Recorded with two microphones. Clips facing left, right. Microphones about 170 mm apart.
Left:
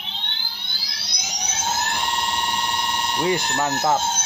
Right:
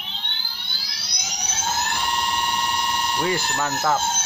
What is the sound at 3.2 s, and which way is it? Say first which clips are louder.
Speech: left 4 dB; 20° left (ahead or behind).